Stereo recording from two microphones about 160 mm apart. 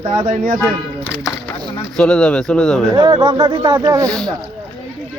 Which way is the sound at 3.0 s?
30° right (ahead or behind).